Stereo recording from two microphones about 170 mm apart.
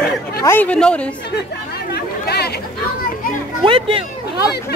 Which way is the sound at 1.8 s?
70° left (ahead or behind).